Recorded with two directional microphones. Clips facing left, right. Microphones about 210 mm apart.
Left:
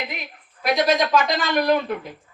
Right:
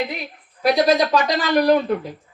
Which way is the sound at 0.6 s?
35° right (ahead or behind).